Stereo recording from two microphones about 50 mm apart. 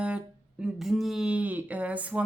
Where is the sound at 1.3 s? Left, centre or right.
Right.